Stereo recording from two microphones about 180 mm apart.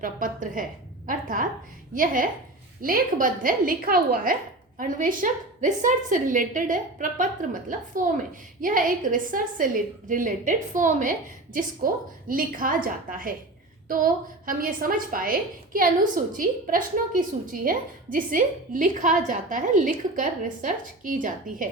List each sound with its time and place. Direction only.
0.0 s a woman's voice: 50° right (ahead or behind)